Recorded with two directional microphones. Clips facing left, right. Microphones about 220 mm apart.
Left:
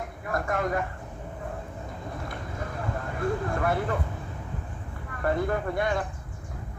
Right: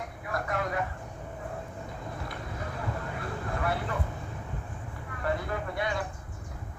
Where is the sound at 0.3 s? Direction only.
50° left (ahead or behind).